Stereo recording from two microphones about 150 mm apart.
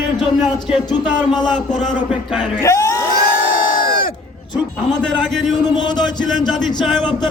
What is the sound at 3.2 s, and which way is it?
Crowd, 75° left (ahead or behind).